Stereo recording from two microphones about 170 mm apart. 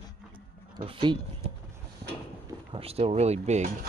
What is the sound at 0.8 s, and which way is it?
Speech, 30° right (ahead or behind).